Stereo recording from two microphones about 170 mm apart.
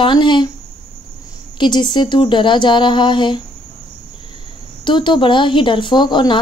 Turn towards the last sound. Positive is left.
turn(degrees=25)  # may be behind; listen again after turning